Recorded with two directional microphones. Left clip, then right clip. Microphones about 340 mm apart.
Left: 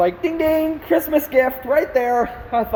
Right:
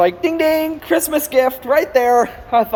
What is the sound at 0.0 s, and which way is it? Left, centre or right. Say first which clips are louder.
Speech: right 3 dB; centre.